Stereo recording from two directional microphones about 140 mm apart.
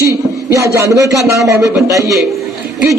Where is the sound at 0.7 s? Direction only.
25° right (ahead or behind).